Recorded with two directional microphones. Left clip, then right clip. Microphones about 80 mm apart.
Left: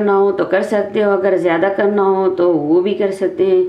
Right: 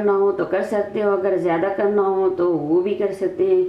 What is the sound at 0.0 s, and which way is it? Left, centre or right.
Speech, left.